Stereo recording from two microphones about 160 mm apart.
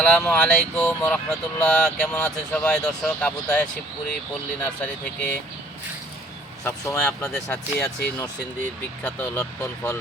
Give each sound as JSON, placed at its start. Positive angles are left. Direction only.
{"t": 0.0, "sound": "speech", "side_deg": 5}
{"t": 6.7, "sound": "speech", "side_deg": 20}
{"t": 7.0, "sound": "speech", "side_deg": 5}
{"t": 9.0, "sound": "speech", "side_deg": 10}